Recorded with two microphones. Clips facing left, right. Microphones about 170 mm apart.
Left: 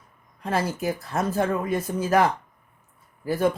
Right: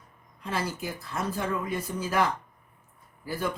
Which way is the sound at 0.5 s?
50° left (ahead or behind).